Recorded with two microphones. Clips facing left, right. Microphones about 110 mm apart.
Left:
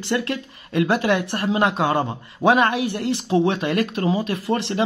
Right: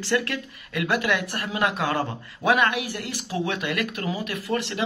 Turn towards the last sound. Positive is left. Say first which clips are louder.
# left 5 dB
turn(degrees=30)  # may be behind; listen again after turning